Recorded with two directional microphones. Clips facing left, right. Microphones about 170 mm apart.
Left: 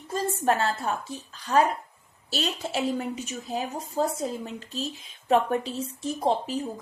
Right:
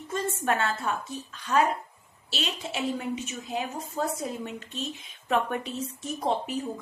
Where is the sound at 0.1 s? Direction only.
35° left (ahead or behind).